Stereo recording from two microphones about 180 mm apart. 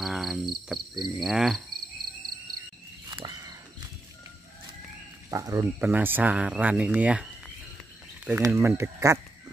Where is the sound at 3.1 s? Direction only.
20° right (ahead or behind).